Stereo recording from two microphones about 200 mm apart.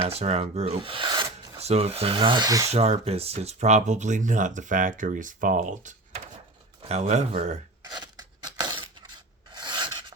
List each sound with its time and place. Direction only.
0.1 s speech: 30° right (ahead or behind)
2.6 s speech: 30° right (ahead or behind)
7.9 s scissors: 20° right (ahead or behind)
9.6 s filing: 25° right (ahead or behind)